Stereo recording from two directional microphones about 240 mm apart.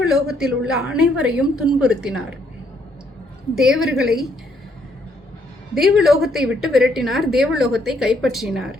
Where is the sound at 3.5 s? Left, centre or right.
Centre.